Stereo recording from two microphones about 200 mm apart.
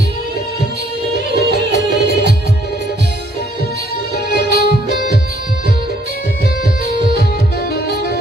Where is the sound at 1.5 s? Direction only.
55° right (ahead or behind).